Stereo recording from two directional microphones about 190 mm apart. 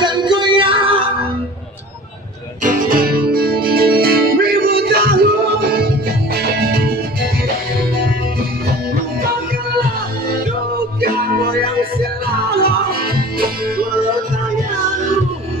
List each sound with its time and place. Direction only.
0.0 s music: 25° right (ahead or behind)
2.6 s music: 45° right (ahead or behind)
6.3 s music: 55° right (ahead or behind)
12.0 s music: 55° right (ahead or behind)